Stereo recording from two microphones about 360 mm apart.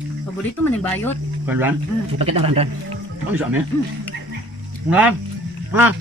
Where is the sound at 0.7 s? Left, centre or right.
Centre.